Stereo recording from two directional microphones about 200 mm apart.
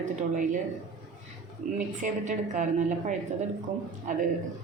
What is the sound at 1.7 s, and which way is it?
A woman's voice, 40° right (ahead or behind).